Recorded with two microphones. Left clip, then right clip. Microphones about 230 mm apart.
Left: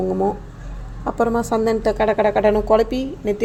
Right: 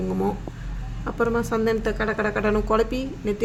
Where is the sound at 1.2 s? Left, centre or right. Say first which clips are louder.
Left 4 dB; centre.